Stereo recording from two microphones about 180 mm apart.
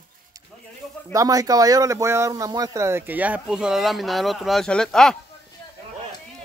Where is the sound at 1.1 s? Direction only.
20° right (ahead or behind); by 5.1 s 5° left (ahead or behind).